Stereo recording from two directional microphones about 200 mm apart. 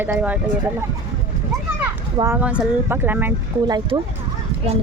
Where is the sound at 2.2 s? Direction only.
10° right (ahead or behind).